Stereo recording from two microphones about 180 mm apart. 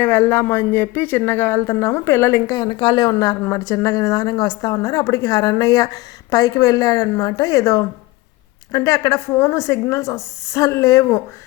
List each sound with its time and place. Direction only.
0.0 s speech: 10° left (ahead or behind)